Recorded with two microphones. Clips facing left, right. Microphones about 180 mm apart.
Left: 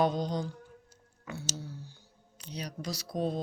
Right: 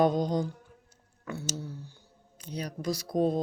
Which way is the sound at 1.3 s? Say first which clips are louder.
Right 4 dB; 55° right (ahead or behind).